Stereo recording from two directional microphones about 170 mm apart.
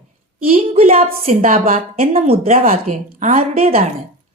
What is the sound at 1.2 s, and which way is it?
Speech, 50° right (ahead or behind).